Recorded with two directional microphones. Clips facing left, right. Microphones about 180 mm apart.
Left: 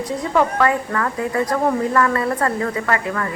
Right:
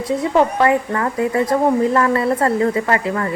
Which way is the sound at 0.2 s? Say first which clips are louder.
Right 2 dB; 25° right (ahead or behind).